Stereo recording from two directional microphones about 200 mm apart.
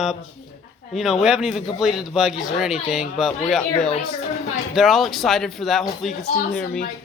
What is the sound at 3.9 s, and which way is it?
Speech, 30° left (ahead or behind).